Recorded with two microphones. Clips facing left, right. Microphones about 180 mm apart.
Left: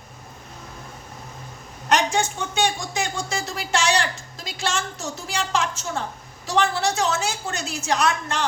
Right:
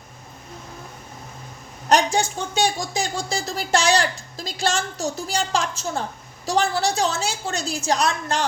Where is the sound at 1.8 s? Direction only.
35° right (ahead or behind).